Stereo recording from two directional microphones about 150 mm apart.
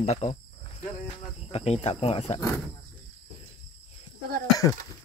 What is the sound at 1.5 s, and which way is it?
Speech, 45° left (ahead or behind).